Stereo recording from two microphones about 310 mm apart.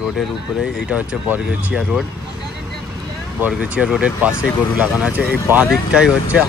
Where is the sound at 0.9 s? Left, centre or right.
Centre.